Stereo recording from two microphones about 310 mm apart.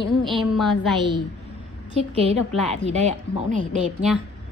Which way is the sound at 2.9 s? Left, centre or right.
Right.